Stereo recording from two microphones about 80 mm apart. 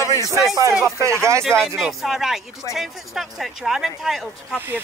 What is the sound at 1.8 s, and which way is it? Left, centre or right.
Speech, centre.